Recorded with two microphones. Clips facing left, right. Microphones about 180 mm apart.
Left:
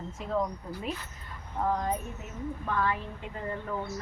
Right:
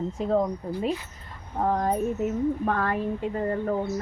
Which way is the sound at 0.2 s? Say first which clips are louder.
Right 6 dB; 40° right (ahead or behind).